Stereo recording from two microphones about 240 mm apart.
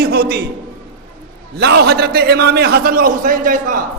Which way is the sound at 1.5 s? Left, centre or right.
Right.